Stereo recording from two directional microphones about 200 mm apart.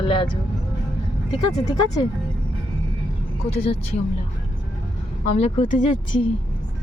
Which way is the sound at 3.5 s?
30° left (ahead or behind).